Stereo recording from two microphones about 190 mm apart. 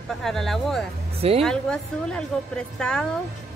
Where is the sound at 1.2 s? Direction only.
30° right (ahead or behind).